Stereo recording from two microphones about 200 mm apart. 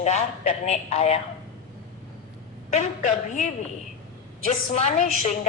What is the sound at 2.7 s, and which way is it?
Speech, 35° left (ahead or behind).